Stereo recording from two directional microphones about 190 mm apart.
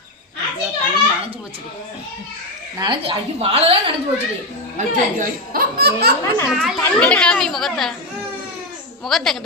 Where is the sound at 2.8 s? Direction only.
30° right (ahead or behind).